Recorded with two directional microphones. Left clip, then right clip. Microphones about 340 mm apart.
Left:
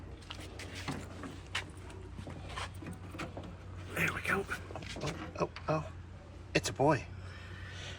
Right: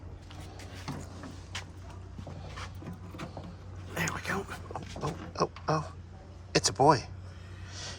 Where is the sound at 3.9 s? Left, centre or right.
Centre.